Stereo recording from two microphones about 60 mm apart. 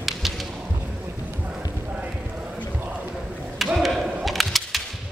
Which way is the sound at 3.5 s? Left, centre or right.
Centre.